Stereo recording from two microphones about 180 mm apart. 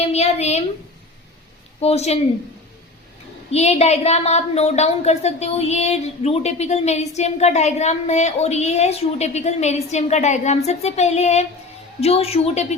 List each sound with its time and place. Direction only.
0.0 s a woman's voice: 35° left (ahead or behind)
1.8 s a woman's voice: 35° left (ahead or behind)
3.5 s a woman's voice: 35° left (ahead or behind)